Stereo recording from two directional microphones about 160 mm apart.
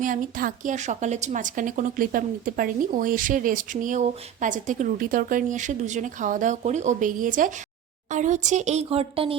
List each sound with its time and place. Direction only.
0.0 s a woman's voice: 60° right (ahead or behind); by 9.4 s 35° right (ahead or behind)